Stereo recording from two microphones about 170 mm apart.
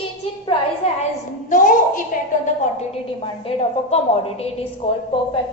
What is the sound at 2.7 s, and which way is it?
A woman's voice, 35° left (ahead or behind).